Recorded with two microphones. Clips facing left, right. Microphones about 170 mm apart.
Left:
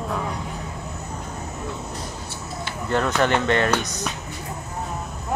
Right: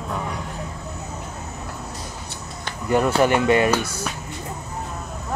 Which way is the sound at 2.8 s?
10° right (ahead or behind).